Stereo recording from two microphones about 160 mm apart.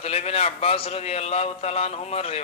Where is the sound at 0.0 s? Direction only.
40° left (ahead or behind).